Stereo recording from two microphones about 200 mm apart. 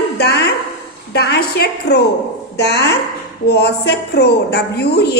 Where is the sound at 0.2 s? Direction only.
55° left (ahead or behind).